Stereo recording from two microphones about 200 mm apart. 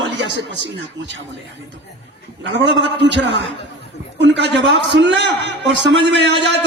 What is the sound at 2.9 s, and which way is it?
A man's voice, 60° right (ahead or behind).